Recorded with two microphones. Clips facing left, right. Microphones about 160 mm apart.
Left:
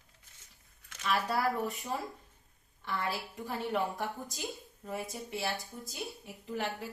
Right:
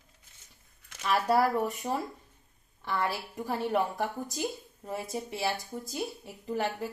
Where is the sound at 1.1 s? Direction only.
45° right (ahead or behind).